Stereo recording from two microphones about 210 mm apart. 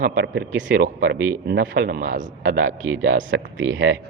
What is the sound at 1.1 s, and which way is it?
Speech, 10° right (ahead or behind).